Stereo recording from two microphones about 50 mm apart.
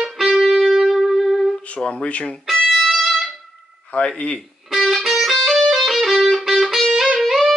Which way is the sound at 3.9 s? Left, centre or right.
Left.